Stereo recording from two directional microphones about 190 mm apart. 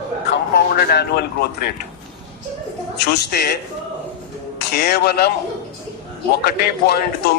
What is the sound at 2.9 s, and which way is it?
Speech, 60° left (ahead or behind).